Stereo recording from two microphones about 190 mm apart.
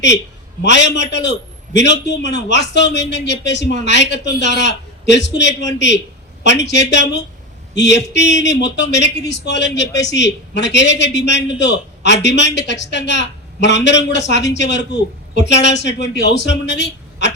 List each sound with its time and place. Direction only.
0.6 s a man's voice: 65° left (ahead or behind)